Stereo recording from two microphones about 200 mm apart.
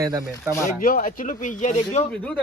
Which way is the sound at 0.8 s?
45° left (ahead or behind).